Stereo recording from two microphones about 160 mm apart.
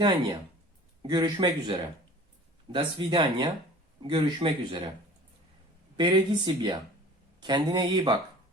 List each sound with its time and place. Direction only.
0.0 s a man's voice: 30° right (ahead or behind)
6.0 s speech: 25° right (ahead or behind)